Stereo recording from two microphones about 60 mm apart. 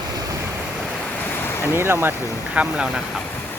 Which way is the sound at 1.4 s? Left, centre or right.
Left.